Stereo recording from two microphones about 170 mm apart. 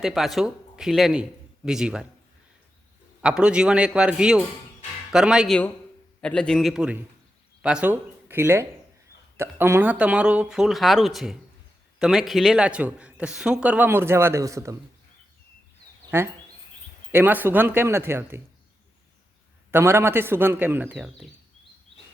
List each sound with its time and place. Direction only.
0.0 s speech: centre (ahead or behind)
3.2 s speech: 5° right (ahead or behind)
17.1 s speech: 10° right (ahead or behind)
19.7 s speech: 15° right (ahead or behind)